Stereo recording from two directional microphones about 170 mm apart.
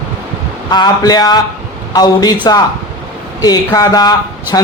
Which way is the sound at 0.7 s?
25° left (ahead or behind).